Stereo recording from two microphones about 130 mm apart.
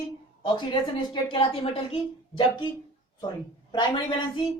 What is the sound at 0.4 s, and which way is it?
A woman's voice, 35° left (ahead or behind).